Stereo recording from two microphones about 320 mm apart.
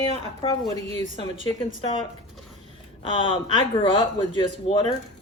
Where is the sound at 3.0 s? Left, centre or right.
Centre.